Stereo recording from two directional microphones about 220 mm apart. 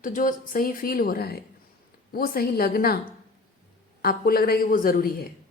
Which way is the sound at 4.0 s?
40° left (ahead or behind).